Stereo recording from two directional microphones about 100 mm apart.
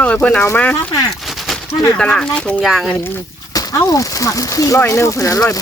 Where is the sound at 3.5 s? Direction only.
35° left (ahead or behind).